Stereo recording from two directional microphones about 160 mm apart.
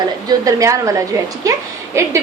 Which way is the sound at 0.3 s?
20° right (ahead or behind).